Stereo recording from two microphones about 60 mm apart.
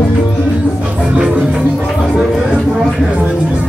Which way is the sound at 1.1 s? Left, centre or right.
Centre.